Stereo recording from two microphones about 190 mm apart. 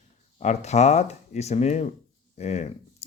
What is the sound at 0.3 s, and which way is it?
Speech, 35° left (ahead or behind).